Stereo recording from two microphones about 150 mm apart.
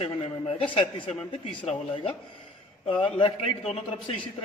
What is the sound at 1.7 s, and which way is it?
A man's voice, 40° left (ahead or behind).